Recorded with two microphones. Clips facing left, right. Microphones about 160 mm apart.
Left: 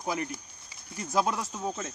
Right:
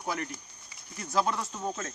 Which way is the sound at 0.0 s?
15° left (ahead or behind).